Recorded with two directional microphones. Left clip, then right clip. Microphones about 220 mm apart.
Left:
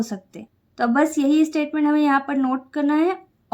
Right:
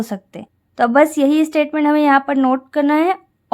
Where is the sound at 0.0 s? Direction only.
30° right (ahead or behind).